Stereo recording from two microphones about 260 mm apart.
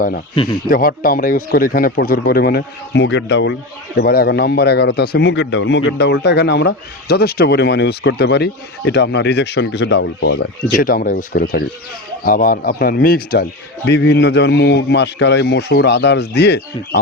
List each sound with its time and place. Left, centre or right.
0.3 s speech: centre
0.7 s a man's voice: left